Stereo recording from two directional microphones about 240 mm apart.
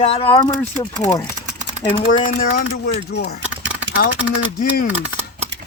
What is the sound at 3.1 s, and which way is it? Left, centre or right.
Speech, left.